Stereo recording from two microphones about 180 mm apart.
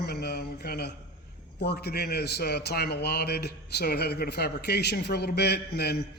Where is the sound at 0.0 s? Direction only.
65° left (ahead or behind).